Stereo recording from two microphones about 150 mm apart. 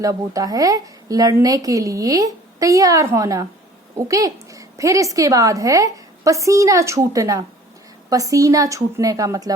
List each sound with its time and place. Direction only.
0.0 s a woman's voice: 25° right (ahead or behind)